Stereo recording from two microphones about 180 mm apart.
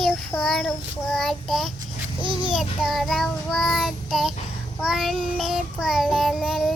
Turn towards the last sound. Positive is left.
turn(degrees=0)  # may be behind; listen again after turning